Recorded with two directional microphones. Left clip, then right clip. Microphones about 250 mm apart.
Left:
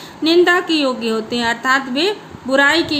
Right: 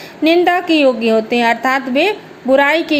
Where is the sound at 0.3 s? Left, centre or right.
Centre.